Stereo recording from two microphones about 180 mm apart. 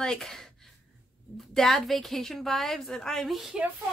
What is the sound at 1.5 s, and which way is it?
A woman's voice, centre (ahead or behind).